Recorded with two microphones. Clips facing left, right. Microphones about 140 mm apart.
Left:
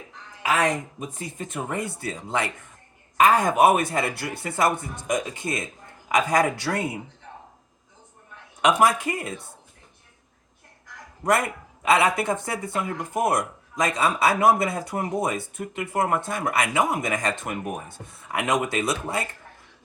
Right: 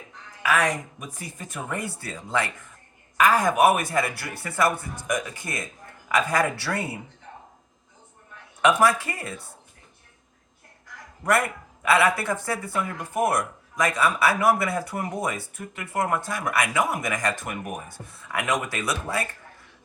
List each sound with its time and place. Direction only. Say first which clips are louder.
0.4 s speech: left 1 dB; 25° left (ahead or behind)
8.6 s speech: even; 15° left (ahead or behind)
11.3 s speech: left 1 dB; 20° left (ahead or behind)